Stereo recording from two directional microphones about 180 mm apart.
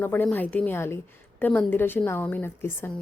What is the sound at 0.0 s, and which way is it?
A woman's voice, 10° left (ahead or behind).